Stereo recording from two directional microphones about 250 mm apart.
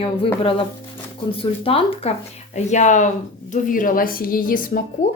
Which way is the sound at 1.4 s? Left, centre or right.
Left.